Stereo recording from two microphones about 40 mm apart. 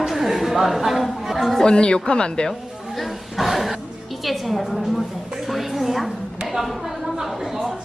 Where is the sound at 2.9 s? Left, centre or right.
Centre.